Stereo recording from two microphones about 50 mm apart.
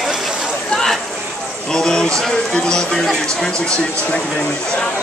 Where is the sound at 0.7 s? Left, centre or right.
Centre.